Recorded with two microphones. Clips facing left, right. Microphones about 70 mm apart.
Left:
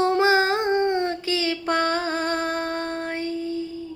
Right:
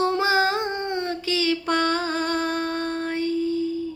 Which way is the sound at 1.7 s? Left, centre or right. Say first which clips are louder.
Left 3 dB; left.